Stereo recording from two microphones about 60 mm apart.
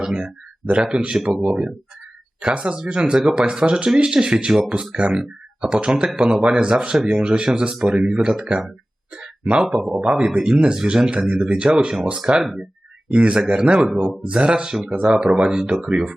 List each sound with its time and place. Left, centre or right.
0.0 s speech: centre
9.6 s speech: centre
9.9 s speech: centre
11.7 s speech: centre
13.1 s speech: right
14.3 s speech: centre